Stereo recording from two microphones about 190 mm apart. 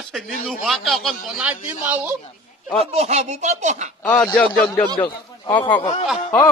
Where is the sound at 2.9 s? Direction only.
35° right (ahead or behind).